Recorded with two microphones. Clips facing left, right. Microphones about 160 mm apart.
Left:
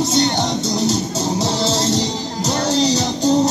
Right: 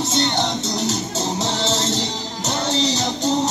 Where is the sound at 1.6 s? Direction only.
35° left (ahead or behind).